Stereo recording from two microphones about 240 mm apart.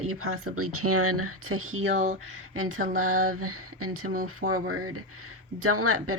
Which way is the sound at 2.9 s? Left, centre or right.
Right.